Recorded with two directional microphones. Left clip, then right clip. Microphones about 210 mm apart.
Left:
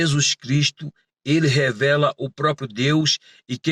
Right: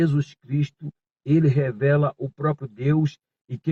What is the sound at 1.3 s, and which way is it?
Speech, 15° left (ahead or behind).